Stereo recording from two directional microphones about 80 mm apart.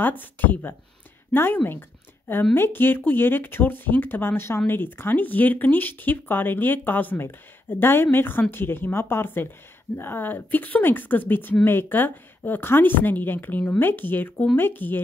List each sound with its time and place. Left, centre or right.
0.0 s a woman's voice: left